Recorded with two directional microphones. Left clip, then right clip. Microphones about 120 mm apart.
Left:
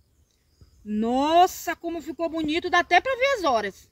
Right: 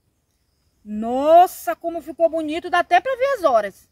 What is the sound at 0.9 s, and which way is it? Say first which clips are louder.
Speech: right 7 dB; 25° right (ahead or behind).